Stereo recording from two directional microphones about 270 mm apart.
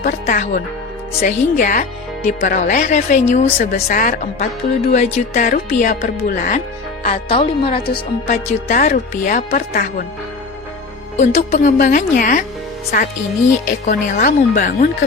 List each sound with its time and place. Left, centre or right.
0.0 s speech: left
11.2 s speech: left
13.7 s speech: left